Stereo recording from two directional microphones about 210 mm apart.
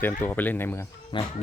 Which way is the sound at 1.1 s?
20° left (ahead or behind).